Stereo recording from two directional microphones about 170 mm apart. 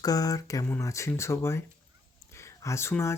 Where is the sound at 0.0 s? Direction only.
20° left (ahead or behind).